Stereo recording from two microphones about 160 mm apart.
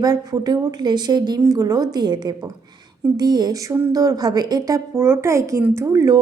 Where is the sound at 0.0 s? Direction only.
25° right (ahead or behind).